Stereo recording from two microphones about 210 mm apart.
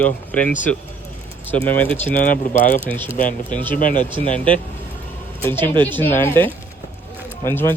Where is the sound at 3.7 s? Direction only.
40° left (ahead or behind).